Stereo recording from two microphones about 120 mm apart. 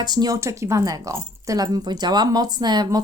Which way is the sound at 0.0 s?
35° right (ahead or behind).